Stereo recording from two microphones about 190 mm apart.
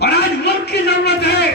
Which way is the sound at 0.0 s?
60° left (ahead or behind).